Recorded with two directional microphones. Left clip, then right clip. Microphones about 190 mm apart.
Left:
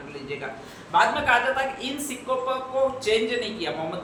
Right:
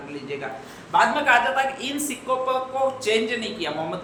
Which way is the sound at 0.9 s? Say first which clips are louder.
Right 2 dB; 20° right (ahead or behind).